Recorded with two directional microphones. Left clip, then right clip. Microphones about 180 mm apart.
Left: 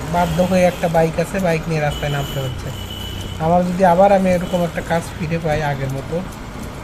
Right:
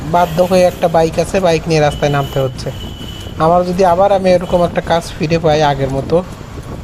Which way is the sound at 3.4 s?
25° right (ahead or behind).